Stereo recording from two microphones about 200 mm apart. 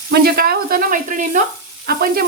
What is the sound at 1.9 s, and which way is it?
Speech, 50° right (ahead or behind).